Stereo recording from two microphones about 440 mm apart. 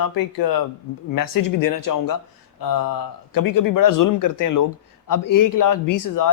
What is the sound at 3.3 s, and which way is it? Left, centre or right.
Speech, left.